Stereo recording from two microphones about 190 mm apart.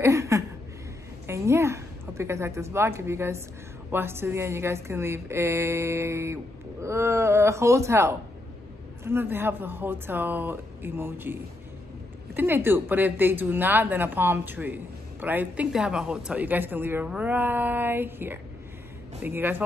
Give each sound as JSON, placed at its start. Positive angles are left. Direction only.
{"t": 0.0, "sound": "a sound", "side_deg": -15}
{"t": 1.2, "sound": "a woman's voice", "side_deg": -15}
{"t": 12.4, "sound": "a woman's voice", "side_deg": -10}